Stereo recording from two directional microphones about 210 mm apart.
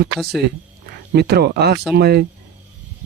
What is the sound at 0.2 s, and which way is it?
Speech, centre (ahead or behind).